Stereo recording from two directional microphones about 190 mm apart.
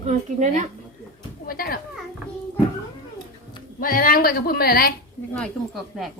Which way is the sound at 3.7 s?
50° left (ahead or behind).